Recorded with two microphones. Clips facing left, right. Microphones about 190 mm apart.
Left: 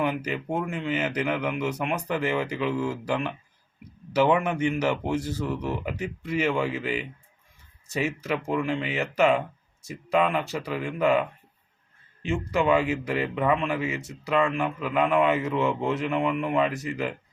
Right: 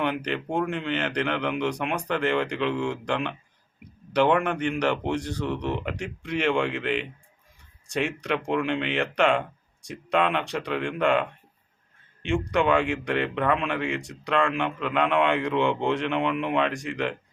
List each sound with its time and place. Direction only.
0.0 s speech: 5° left (ahead or behind)